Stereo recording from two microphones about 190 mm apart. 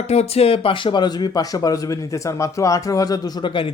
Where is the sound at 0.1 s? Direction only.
35° left (ahead or behind).